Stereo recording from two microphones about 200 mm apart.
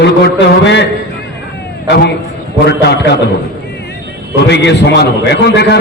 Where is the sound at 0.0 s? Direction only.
60° left (ahead or behind).